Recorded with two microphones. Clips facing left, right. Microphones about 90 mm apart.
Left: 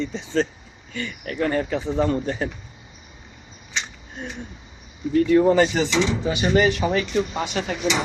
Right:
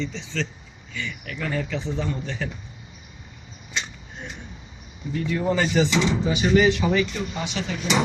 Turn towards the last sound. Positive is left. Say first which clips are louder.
# left 3 dB
turn(degrees=45)  # may be behind; listen again after turning